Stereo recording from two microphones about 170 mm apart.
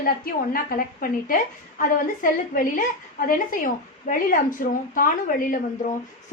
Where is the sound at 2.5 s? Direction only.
55° left (ahead or behind).